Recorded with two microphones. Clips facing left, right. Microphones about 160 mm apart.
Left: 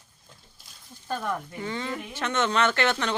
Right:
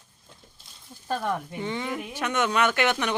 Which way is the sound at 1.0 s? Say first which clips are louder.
Right 2 dB; 20° right (ahead or behind).